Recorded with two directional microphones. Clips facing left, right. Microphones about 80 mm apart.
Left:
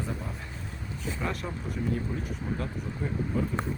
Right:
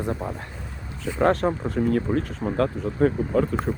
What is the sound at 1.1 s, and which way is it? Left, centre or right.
Speech, right.